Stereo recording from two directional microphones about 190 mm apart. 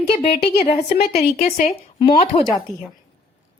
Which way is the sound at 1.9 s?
30° left (ahead or behind).